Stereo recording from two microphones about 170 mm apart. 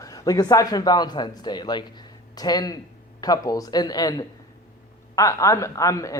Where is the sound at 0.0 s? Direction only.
20° left (ahead or behind).